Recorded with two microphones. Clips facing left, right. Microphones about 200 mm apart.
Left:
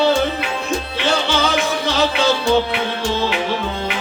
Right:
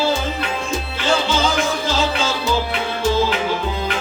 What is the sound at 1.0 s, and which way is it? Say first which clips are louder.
Music: right 1 dB; 65° left (ahead or behind).